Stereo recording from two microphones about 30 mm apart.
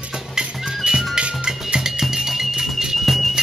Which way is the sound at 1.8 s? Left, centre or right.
Centre.